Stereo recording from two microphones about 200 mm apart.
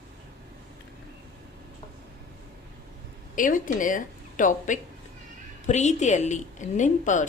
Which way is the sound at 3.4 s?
40° left (ahead or behind).